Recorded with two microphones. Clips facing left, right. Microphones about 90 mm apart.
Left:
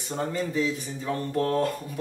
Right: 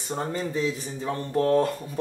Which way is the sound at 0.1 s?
30° right (ahead or behind).